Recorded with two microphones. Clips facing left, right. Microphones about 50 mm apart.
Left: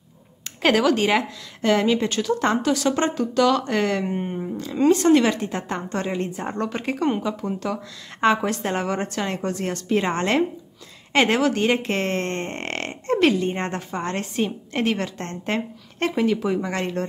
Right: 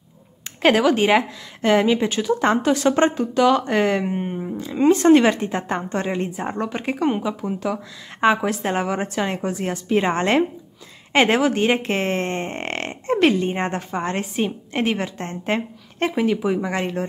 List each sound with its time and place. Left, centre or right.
0.6 s a woman's voice: centre
4.6 s a woman's voice: centre